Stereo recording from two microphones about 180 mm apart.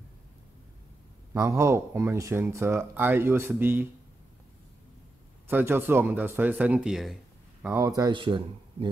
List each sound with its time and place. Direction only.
1.3 s speech: 15° right (ahead or behind)
5.5 s speech: 10° right (ahead or behind)
7.6 s speech: 15° right (ahead or behind)